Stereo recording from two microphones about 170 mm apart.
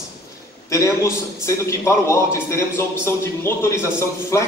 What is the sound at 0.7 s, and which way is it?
A man's voice, 15° left (ahead or behind).